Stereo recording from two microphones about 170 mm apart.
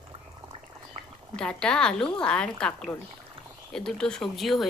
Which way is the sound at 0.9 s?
40° right (ahead or behind).